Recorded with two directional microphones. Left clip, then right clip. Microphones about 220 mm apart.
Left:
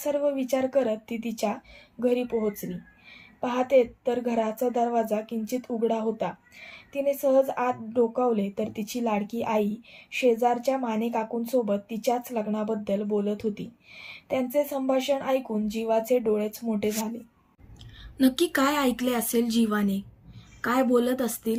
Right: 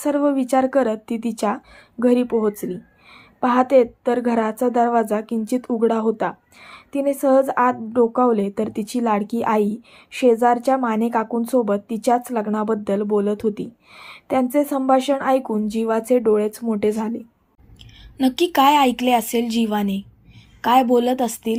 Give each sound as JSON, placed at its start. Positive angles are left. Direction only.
{"t": 0.0, "sound": "a woman's voice", "side_deg": -15}
{"t": 16.1, "sound": "speech", "side_deg": -45}
{"t": 16.4, "sound": "a woman's voice", "side_deg": -15}
{"t": 18.2, "sound": "a woman's voice", "side_deg": -5}